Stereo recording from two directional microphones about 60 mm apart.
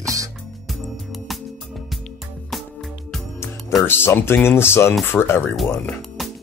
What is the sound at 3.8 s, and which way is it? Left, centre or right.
Speech, left.